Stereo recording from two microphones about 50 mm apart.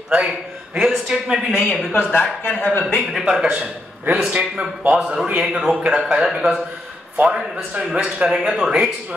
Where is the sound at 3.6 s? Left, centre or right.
Right; by 5.7 s centre.